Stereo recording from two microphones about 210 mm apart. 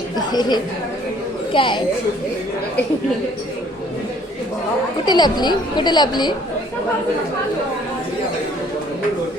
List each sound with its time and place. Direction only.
0.2 s a woman's voice: 20° left (ahead or behind)
5.0 s a woman's voice: 20° left (ahead or behind)